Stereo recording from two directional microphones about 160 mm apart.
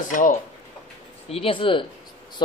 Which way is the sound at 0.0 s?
55° left (ahead or behind).